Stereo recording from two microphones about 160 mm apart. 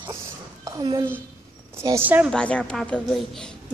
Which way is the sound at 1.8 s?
15° right (ahead or behind).